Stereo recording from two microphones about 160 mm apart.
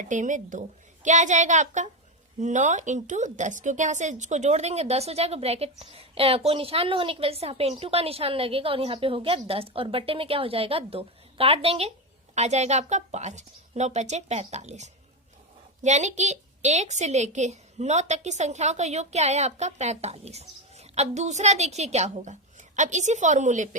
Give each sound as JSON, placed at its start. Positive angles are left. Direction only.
{"t": 0.0, "sound": "a woman's voice", "side_deg": -50}